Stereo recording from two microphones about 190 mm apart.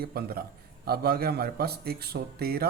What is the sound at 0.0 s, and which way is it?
A man's voice, 55° right (ahead or behind).